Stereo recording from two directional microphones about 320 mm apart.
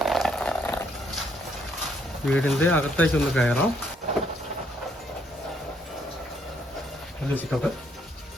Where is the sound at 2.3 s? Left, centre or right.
Centre.